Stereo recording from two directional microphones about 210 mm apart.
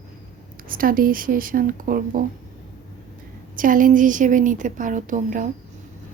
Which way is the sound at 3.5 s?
40° right (ahead or behind).